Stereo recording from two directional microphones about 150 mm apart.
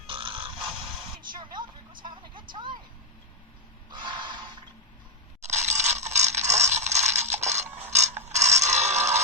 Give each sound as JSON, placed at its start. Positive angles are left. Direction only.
{"t": 0.1, "sound": "a sound", "side_deg": -35}
{"t": 1.3, "sound": "vehicle", "side_deg": -30}
{"t": 3.9, "sound": "snort", "side_deg": -30}
{"t": 5.4, "sound": "mechanisms", "side_deg": -50}